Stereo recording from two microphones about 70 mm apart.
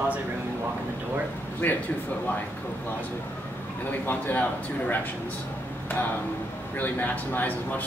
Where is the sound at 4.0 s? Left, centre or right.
Left.